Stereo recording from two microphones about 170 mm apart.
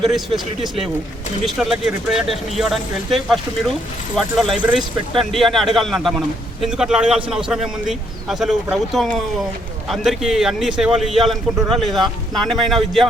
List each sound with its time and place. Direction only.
0.0 s speech: centre (ahead or behind)
1.5 s speech: 5° right (ahead or behind)